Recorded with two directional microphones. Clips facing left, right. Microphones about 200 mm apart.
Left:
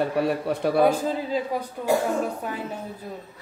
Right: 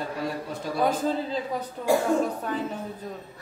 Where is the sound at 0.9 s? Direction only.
10° left (ahead or behind).